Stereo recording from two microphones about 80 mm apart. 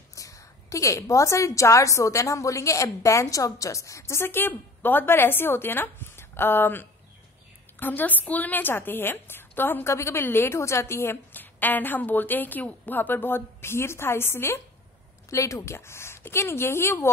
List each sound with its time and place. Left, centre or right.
0.1 s a woman's voice: left